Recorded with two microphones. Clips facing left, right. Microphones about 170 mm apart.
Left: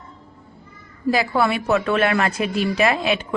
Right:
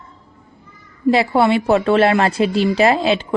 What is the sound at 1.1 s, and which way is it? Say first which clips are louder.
A woman's voice: right 5 dB; 25° right (ahead or behind).